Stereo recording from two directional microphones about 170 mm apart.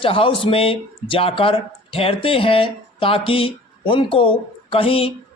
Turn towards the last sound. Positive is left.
turn(degrees=35)  # may be behind; listen again after turning